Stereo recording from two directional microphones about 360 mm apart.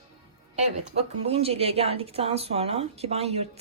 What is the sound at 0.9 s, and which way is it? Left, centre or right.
A woman's voice, centre.